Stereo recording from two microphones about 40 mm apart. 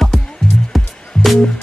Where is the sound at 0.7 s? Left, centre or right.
Centre.